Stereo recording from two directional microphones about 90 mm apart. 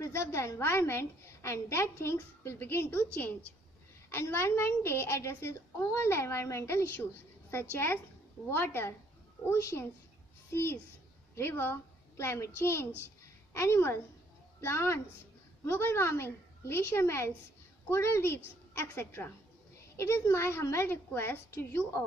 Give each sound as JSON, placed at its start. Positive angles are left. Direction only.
{"t": 0.0, "sound": "a woman's voice", "side_deg": 30}
{"t": 4.1, "sound": "a woman's voice", "side_deg": 25}